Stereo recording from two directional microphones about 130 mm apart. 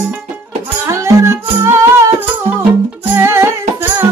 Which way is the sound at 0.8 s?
20° right (ahead or behind).